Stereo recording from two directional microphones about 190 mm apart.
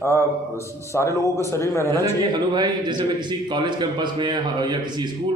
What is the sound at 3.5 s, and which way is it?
A man's voice, 25° right (ahead or behind).